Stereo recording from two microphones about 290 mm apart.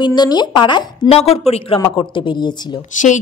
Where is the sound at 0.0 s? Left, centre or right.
Centre.